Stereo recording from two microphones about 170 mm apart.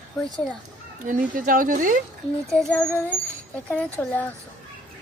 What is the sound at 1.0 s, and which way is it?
Speech, 50° right (ahead or behind).